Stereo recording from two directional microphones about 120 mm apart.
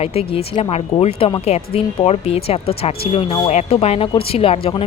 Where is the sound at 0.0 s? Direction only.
55° left (ahead or behind).